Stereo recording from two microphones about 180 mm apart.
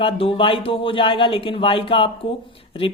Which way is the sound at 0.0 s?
30° left (ahead or behind).